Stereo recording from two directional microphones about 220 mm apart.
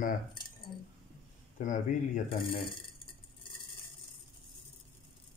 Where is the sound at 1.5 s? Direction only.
35° left (ahead or behind).